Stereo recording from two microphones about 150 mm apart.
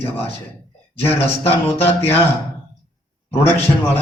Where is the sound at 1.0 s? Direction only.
15° left (ahead or behind).